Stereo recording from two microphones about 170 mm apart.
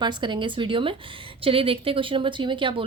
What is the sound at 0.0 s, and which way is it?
A woman's voice, 25° right (ahead or behind).